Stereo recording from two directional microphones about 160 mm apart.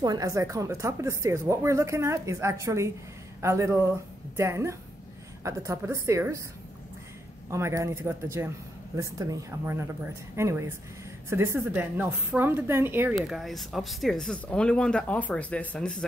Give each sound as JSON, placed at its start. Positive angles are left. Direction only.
{"t": 0.0, "sound": "a woman's voice", "side_deg": -25}
{"t": 7.5, "sound": "a woman's voice", "side_deg": -20}
{"t": 13.1, "sound": "speech", "side_deg": 0}